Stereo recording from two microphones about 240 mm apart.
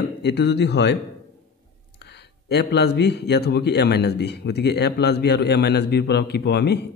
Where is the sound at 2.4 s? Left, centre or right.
Left.